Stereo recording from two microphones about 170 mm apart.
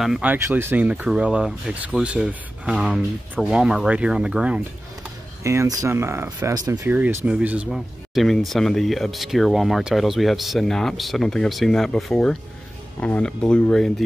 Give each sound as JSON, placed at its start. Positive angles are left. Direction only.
{"t": 0.0, "sound": "speech", "side_deg": -5}
{"t": 5.4, "sound": "speech", "side_deg": -15}
{"t": 6.8, "sound": "speech", "side_deg": -10}